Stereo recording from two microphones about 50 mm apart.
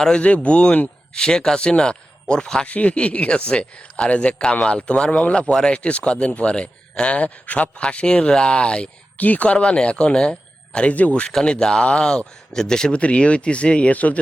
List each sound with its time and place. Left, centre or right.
0.0 s speech: centre
2.6 s speech: left
9.1 s speech: left
9.6 s speech: centre